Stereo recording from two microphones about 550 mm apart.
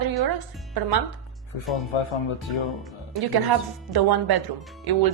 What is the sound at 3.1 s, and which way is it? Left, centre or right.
Speech, right.